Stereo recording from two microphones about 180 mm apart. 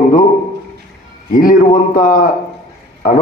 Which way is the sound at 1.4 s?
50° left (ahead or behind).